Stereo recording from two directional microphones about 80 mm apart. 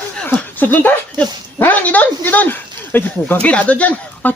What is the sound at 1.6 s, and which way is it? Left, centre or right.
Speech, centre.